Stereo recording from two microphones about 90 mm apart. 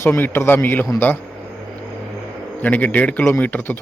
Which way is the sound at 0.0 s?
25° left (ahead or behind).